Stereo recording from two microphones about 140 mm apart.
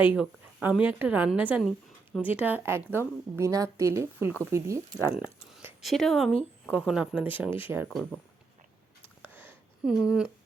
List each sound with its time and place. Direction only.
0.0 s speech: 15° right (ahead or behind)
5.8 s speech: centre (ahead or behind); by 7.9 s 15° right (ahead or behind)
7.9 s speech: 5° left (ahead or behind)
9.2 s a sound: 15° right (ahead or behind)